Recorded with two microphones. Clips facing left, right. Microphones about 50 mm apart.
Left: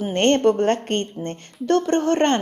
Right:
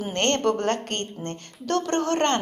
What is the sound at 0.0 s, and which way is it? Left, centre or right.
A woman's voice, centre.